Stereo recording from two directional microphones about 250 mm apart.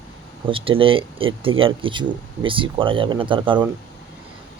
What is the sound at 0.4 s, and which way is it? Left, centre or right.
Speech, right.